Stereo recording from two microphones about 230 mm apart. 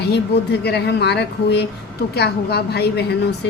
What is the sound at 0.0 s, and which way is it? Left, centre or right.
A woman's voice, left.